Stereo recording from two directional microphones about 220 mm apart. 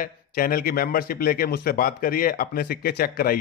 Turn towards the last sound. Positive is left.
turn(degrees=45)  # may be behind; listen again after turning